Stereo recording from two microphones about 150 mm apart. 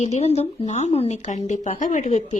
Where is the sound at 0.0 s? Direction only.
50° left (ahead or behind).